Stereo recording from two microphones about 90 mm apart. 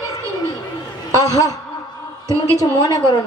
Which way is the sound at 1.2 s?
45° left (ahead or behind).